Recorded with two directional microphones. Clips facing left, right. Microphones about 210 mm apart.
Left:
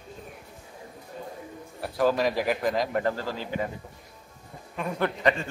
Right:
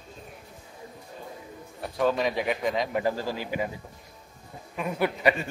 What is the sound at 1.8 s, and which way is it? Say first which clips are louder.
Speech: left 1 dB; centre (ahead or behind).